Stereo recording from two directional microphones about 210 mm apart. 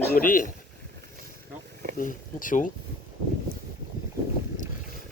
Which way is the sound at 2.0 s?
40° left (ahead or behind).